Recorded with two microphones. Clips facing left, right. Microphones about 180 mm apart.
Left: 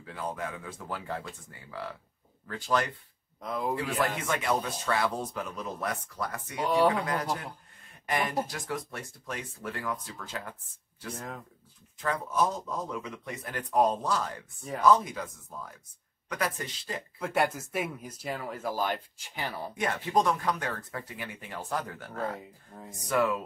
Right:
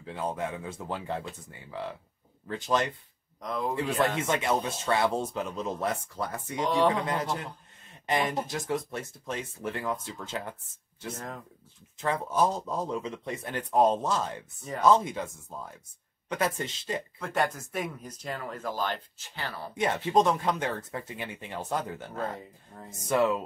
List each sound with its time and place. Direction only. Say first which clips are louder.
0.0 s speech: right 3 dB; 25° right (ahead or behind)
3.3 s speech: right 1 dB; 5° left (ahead or behind)
3.7 s speech: right 5 dB; 25° right (ahead or behind)
6.6 s speech: even; 10° left (ahead or behind)
8.1 s speech: right 2 dB; 25° right (ahead or behind)
11.1 s speech: left 2 dB; centre (ahead or behind)
12.0 s speech: right 2 dB; 30° right (ahead or behind)
16.3 s speech: right 3 dB; 25° right (ahead or behind)
17.2 s speech: left 3 dB; 10° left (ahead or behind)
19.8 s speech: right 3 dB; 25° right (ahead or behind)
22.2 s speech: left 2 dB; centre (ahead or behind)
23.0 s speech: right 2 dB; 25° right (ahead or behind)